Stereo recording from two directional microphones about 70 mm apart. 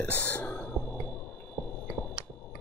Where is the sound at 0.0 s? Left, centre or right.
Left.